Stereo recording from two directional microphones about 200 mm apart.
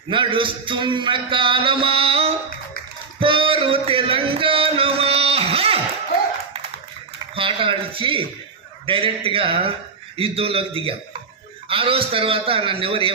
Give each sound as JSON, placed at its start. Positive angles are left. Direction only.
{"t": 0.1, "sound": "a man's voice", "side_deg": -25}
{"t": 3.2, "sound": "music", "side_deg": -25}
{"t": 7.3, "sound": "a man's voice", "side_deg": -25}